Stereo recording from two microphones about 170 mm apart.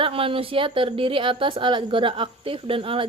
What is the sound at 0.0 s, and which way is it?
A woman's voice, 30° right (ahead or behind).